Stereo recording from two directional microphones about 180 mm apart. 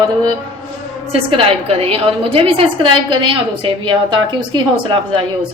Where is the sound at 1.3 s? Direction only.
30° right (ahead or behind).